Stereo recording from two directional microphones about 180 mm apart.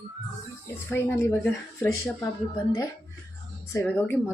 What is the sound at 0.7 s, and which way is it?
A woman's voice, 10° left (ahead or behind).